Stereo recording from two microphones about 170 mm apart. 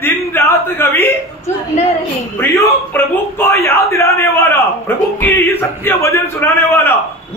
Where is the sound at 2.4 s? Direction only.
15° left (ahead or behind).